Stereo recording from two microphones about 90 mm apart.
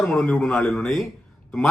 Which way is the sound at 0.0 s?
10° left (ahead or behind).